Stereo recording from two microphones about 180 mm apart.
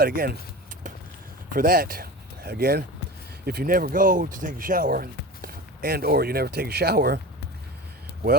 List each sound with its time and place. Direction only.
0.0 s speech: 55° right (ahead or behind)
1.5 s speech: 55° right (ahead or behind)